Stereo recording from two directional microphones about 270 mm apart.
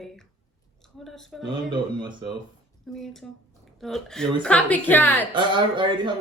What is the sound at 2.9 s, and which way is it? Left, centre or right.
A woman's voice, centre.